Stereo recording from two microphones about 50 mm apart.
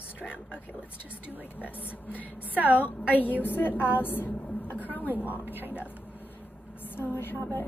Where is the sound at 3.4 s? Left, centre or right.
Left.